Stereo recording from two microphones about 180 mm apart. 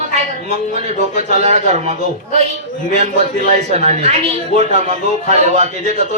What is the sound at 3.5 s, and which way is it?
A man's voice, 35° right (ahead or behind).